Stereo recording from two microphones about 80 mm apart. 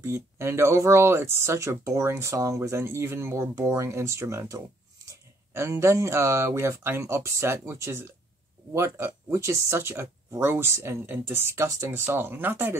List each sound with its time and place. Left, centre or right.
0.0 s speech: right
11.9 s speech: right